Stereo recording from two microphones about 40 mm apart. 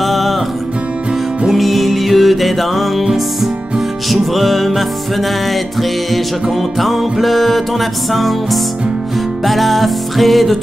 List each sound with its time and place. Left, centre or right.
0.0 s music: centre
1.5 s music: centre